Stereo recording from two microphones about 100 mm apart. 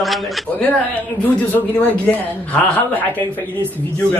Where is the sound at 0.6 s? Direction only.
15° left (ahead or behind).